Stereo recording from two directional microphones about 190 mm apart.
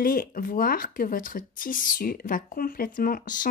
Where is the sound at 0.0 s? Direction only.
45° left (ahead or behind).